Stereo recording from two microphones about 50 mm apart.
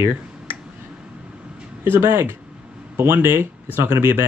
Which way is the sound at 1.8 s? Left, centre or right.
Right.